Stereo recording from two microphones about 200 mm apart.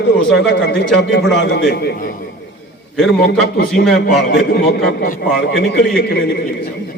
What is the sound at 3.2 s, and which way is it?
A man's voice, 50° left (ahead or behind).